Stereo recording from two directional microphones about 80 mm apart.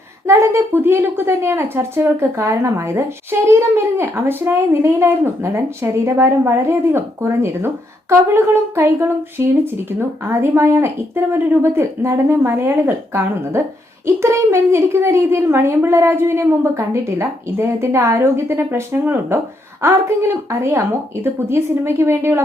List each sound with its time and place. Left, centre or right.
0.3 s a woman's voice: right